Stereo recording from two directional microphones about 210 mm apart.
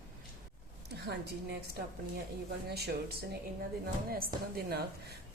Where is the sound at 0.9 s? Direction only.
50° right (ahead or behind).